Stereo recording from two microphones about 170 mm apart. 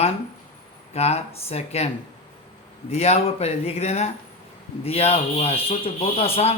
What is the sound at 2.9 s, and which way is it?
Speech, 35° left (ahead or behind).